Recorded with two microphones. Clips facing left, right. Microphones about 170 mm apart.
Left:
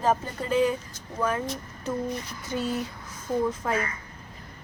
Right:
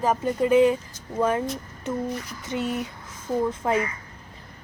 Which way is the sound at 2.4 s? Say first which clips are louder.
Right 1 dB; 25° right (ahead or behind).